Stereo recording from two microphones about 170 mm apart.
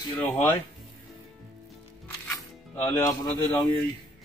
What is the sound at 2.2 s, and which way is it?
Music, 15° left (ahead or behind).